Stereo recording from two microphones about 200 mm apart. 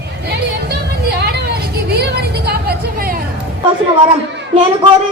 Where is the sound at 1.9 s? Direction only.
55° right (ahead or behind).